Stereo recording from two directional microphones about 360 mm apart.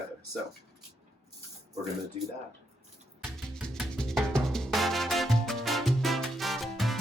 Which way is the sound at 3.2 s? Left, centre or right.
Centre.